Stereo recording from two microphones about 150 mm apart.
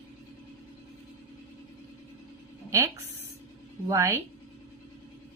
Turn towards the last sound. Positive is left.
turn(degrees=-20)  # may be behind; listen again after turning